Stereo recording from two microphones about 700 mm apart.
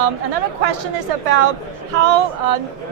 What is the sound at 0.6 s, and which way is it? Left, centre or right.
Speech, right.